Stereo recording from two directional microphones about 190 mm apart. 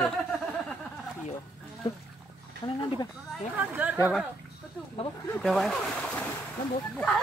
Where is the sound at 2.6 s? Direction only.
25° left (ahead or behind).